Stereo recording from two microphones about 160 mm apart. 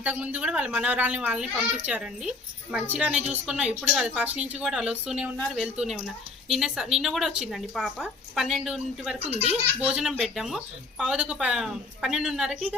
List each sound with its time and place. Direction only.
0.0 s speech: 10° right (ahead or behind)
9.2 s speech: 40° right (ahead or behind)
9.8 s speech: 5° right (ahead or behind)